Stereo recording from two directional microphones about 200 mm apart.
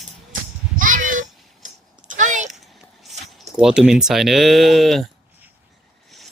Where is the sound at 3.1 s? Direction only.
Centre (ahead or behind).